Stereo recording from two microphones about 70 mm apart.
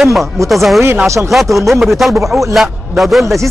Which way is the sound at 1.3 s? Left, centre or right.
Centre.